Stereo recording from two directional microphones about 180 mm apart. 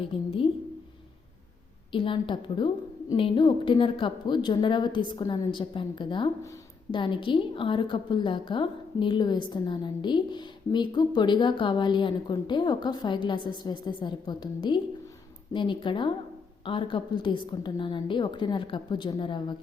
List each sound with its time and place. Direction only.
0.0 s a woman's voice: 30° left (ahead or behind)
1.9 s a woman's voice: 30° left (ahead or behind)